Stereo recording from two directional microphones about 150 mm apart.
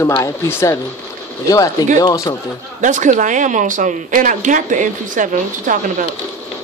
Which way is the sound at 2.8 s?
55° right (ahead or behind).